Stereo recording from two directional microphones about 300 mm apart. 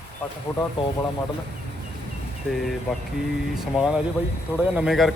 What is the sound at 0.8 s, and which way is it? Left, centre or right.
Speech, centre.